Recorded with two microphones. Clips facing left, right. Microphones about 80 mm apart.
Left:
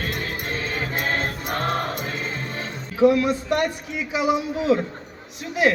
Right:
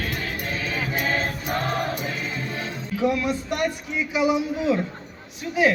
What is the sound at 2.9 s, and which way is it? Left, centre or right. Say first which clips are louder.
Speech: left 6 dB; left.